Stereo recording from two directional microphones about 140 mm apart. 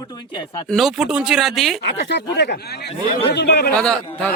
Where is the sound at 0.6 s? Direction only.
Centre (ahead or behind).